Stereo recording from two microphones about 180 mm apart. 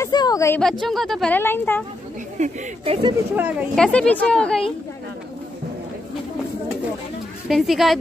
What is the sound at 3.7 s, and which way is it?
Speech, 5° left (ahead or behind).